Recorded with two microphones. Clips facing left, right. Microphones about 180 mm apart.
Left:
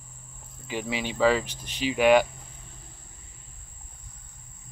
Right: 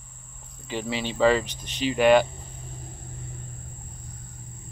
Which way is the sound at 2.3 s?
40° right (ahead or behind).